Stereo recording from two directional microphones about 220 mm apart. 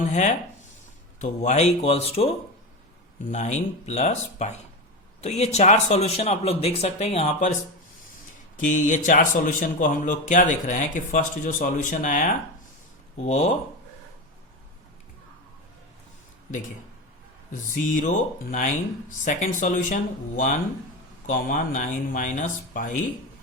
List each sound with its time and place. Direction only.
0.0 s speech: 30° left (ahead or behind)
8.5 s speech: 35° left (ahead or behind)
17.7 s speech: 35° left (ahead or behind)